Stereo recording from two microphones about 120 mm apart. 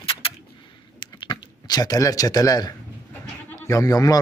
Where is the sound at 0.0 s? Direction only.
50° left (ahead or behind).